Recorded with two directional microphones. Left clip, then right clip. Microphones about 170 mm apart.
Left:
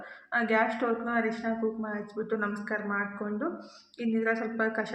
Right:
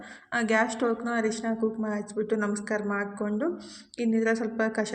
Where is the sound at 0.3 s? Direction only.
40° right (ahead or behind).